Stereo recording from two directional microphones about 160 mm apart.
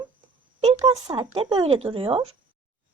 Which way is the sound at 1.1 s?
30° right (ahead or behind).